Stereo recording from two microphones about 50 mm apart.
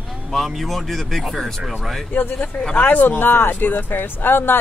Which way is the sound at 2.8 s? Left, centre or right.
Left.